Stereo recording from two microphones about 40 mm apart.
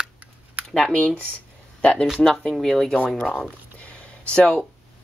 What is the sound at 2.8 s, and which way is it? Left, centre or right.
Speech, left.